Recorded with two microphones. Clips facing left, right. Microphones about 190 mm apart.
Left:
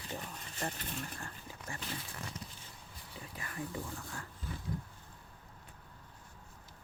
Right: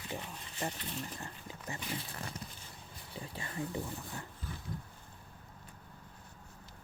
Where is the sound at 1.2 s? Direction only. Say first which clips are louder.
Right 2 dB; 20° right (ahead or behind).